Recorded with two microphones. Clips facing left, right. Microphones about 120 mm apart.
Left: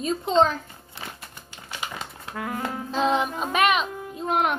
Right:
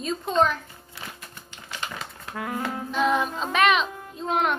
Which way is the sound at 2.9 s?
30° left (ahead or behind).